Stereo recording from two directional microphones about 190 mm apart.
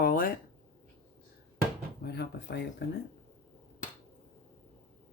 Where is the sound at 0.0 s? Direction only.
50° left (ahead or behind).